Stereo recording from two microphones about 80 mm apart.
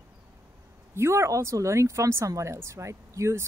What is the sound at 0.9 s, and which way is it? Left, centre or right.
Speech, right.